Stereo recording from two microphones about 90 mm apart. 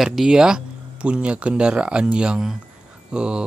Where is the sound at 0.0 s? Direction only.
5° right (ahead or behind).